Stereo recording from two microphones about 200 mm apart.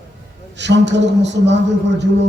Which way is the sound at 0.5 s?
60° right (ahead or behind).